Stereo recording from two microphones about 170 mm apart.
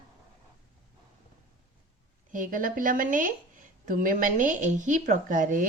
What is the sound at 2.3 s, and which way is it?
A woman's voice, 55° right (ahead or behind).